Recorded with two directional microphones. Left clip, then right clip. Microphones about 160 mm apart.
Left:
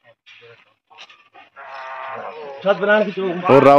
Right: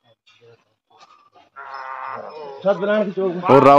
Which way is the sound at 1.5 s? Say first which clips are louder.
Right 1 dB; 50° right (ahead or behind).